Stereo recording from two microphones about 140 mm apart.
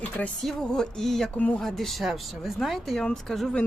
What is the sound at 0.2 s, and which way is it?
Speech, 5° left (ahead or behind).